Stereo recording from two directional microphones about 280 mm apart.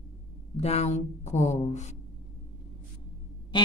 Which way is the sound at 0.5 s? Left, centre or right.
Left.